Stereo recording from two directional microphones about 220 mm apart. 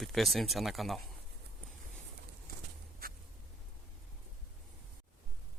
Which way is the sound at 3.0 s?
40° right (ahead or behind).